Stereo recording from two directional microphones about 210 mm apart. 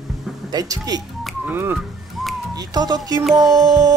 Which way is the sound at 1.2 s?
Centre (ahead or behind).